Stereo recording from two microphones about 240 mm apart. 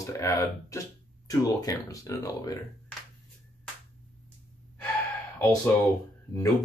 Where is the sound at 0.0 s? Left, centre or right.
Centre.